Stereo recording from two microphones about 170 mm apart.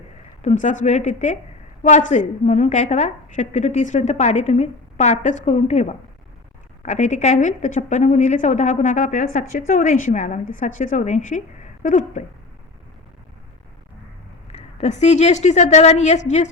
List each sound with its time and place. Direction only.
0.4 s a woman's voice: 45° left (ahead or behind)
14.5 s a woman's voice: 40° left (ahead or behind)